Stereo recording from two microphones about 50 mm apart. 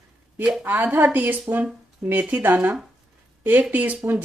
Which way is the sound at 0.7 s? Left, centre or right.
Right.